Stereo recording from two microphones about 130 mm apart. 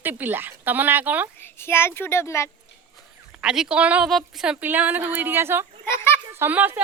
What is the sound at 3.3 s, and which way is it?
A woman's voice, 5° right (ahead or behind).